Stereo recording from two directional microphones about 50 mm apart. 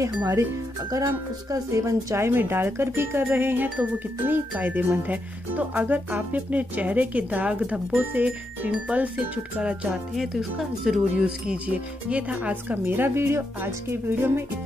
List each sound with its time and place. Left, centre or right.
0.0 s speech: right
1.7 s speech: right
7.9 s speech: right; by 9.9 s centre
10.1 s speech: centre
11.2 s speech: right
12.7 s speech: right
13.1 s speech: right